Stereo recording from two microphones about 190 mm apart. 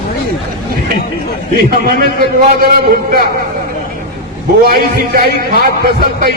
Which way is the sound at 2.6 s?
55° right (ahead or behind).